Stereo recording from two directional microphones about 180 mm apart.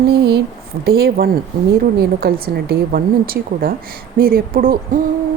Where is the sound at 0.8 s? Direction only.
60° right (ahead or behind).